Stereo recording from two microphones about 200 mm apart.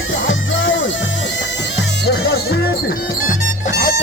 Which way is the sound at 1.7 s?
55° left (ahead or behind).